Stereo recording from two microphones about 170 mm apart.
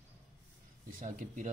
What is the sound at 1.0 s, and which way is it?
Speech, 50° right (ahead or behind).